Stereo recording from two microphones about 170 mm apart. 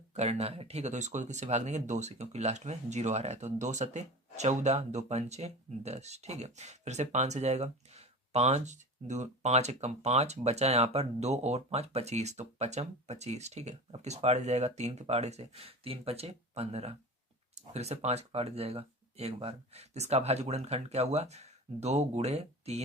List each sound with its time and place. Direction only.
0.1 s speech: 40° right (ahead or behind)